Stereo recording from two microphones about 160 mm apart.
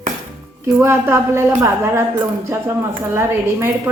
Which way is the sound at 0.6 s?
15° right (ahead or behind).